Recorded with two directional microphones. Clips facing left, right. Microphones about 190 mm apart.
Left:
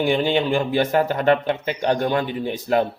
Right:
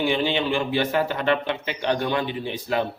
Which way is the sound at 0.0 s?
45° left (ahead or behind).